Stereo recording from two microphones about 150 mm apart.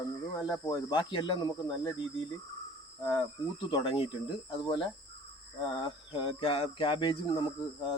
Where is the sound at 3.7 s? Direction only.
35° left (ahead or behind).